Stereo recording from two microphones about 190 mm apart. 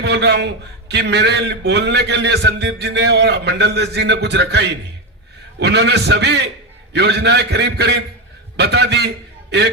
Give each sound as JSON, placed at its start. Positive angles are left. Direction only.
{"t": 0.0, "sound": "a man's voice", "side_deg": -60}